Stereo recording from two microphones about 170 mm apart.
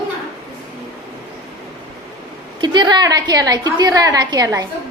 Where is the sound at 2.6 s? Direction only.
25° right (ahead or behind).